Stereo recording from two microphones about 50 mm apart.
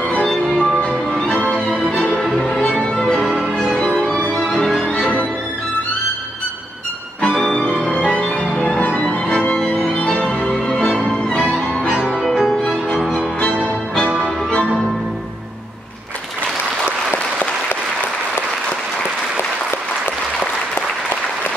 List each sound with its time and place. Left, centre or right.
0.0 s music: centre
7.2 s music: centre
12.1 s music: centre
13.1 s music: left